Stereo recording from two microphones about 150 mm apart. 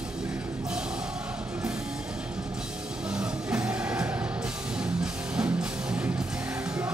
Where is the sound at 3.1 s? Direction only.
5° right (ahead or behind).